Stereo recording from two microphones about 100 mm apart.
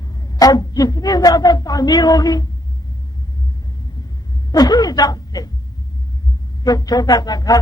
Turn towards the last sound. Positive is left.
turn(degrees=40)  # may be behind; listen again after turning